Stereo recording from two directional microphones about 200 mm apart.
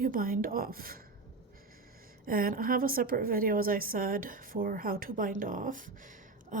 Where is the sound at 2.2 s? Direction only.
45° right (ahead or behind).